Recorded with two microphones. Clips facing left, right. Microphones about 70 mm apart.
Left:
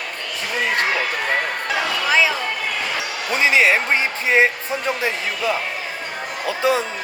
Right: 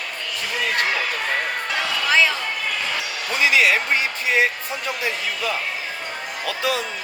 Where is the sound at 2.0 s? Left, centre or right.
Centre.